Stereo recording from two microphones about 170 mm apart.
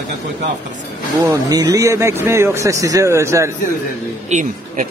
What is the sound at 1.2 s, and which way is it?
Speech, 20° right (ahead or behind).